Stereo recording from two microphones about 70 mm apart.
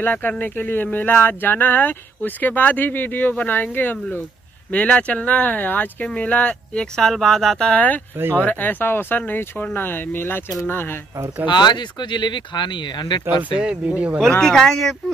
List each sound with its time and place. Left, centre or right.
0.0 s speech: left
4.6 s speech: centre
8.2 s speech: right
8.5 s speech: left
11.5 s speech: left
13.4 s speech: centre
14.4 s speech: centre